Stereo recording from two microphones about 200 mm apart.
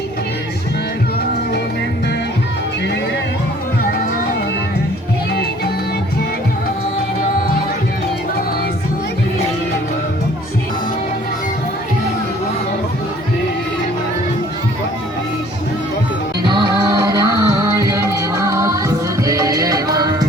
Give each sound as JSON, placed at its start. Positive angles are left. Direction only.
{"t": 16.4, "sound": "music", "side_deg": -20}